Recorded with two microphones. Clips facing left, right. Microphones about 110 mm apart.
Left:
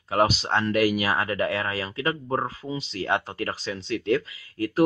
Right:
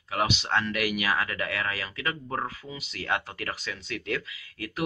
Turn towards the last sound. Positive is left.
turn(degrees=35)  # may be behind; listen again after turning